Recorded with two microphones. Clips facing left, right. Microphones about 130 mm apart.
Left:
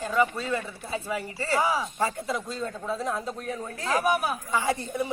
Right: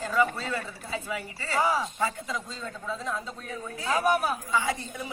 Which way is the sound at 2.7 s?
35° left (ahead or behind).